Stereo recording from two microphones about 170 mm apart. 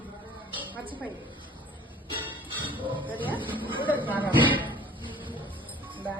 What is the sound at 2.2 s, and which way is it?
Music, 30° right (ahead or behind).